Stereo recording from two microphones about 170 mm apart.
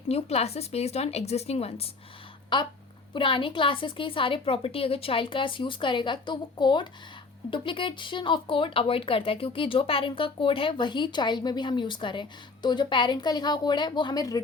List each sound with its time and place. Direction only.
0.1 s speech: 35° left (ahead or behind); by 14.4 s 20° left (ahead or behind)